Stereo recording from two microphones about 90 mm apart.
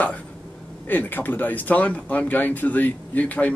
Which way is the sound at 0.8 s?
20° left (ahead or behind).